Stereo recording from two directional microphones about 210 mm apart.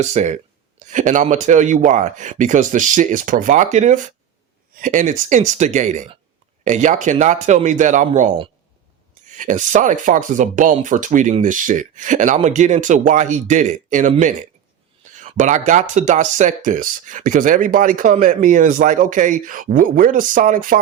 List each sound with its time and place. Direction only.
0.0 s speech: 30° right (ahead or behind)